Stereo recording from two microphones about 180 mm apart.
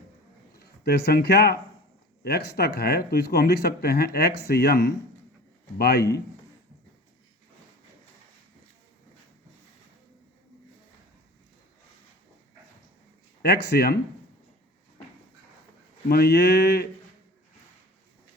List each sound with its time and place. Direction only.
0.5 s speech: 60° left (ahead or behind)
13.4 s speech: 60° left (ahead or behind)
16.0 s speech: 60° left (ahead or behind)